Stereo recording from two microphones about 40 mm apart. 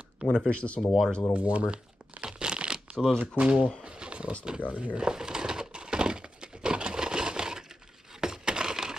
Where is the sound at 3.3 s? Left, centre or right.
Right.